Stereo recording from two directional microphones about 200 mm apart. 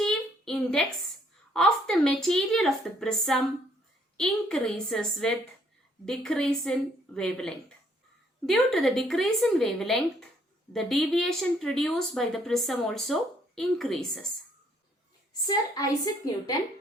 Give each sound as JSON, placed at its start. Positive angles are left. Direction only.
{"t": 0.0, "sound": "a sound", "side_deg": 0}
{"t": 1.5, "sound": "speech", "side_deg": 5}
{"t": 15.4, "sound": "a woman's voice", "side_deg": 20}